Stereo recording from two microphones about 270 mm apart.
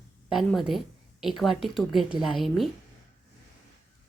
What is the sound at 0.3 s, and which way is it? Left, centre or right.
A woman's voice, centre.